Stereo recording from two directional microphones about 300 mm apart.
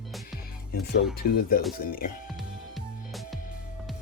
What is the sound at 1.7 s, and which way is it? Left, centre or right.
Speech, left.